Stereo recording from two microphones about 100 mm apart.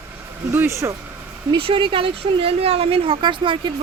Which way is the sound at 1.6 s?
60° right (ahead or behind).